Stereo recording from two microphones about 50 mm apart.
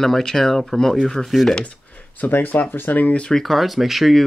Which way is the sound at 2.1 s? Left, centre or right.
Left.